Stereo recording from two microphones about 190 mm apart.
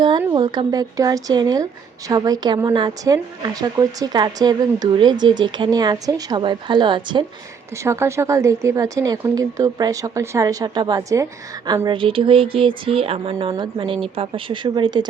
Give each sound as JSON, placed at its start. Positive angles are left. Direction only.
{"t": 0.2, "sound": "speech", "side_deg": -20}
{"t": 7.8, "sound": "speech", "side_deg": -15}